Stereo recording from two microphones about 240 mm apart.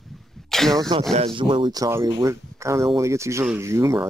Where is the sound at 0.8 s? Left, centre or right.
Centre.